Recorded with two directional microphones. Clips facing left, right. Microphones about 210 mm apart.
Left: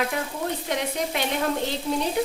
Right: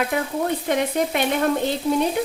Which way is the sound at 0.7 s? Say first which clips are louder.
Right 7 dB; 55° right (ahead or behind).